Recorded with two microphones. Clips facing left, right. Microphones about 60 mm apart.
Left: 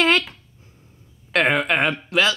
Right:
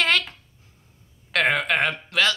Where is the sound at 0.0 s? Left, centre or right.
Centre.